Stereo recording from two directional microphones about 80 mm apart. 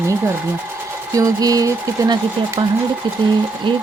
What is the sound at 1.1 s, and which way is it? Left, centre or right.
Speech, right.